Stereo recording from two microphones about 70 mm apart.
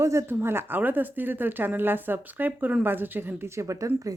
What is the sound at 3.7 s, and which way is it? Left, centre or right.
Speech, right.